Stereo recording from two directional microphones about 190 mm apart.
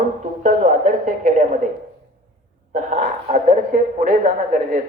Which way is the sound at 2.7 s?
40° right (ahead or behind).